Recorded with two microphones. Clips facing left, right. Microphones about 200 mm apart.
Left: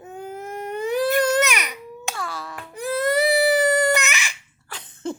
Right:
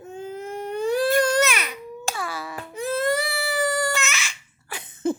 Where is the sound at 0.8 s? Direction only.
20° left (ahead or behind).